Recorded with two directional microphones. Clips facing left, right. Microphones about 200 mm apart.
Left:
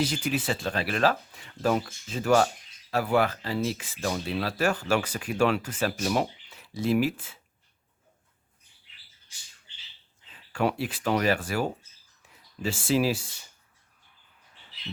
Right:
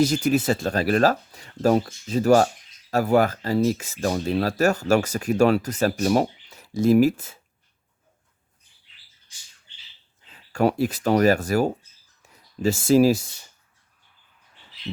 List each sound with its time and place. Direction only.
0.0 s speech: 45° right (ahead or behind)
10.3 s speech: 40° right (ahead or behind)